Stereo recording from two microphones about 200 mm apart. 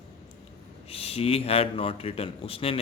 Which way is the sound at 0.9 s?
30° left (ahead or behind).